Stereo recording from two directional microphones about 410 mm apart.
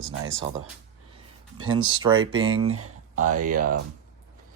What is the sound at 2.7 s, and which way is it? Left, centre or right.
Speech, right.